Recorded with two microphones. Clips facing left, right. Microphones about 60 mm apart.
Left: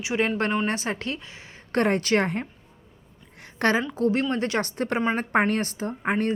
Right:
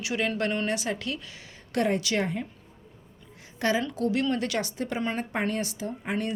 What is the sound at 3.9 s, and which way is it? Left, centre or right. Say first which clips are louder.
Speech: left 3 dB; left.